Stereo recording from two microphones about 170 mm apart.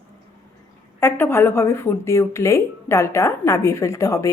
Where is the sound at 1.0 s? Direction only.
15° left (ahead or behind).